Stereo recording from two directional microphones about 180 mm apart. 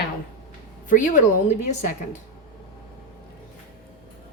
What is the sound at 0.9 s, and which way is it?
Speech, 45° left (ahead or behind).